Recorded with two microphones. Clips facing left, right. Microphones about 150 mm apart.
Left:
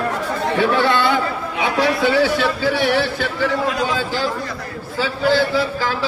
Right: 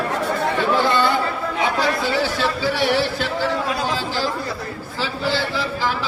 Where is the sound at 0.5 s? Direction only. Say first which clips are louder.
Left 3 dB; 70° left (ahead or behind).